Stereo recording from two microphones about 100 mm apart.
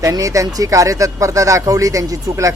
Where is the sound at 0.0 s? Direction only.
35° right (ahead or behind).